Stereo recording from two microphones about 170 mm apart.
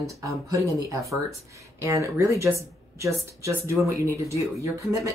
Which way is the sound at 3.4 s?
15° right (ahead or behind).